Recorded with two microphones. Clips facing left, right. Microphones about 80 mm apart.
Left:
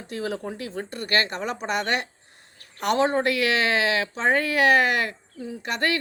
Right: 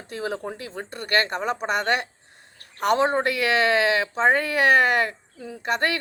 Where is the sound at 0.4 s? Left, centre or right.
Right.